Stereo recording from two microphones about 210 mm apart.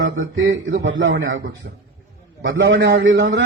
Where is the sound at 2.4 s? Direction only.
60° right (ahead or behind).